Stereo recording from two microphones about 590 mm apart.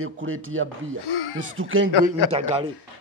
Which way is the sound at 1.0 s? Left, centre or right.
Left.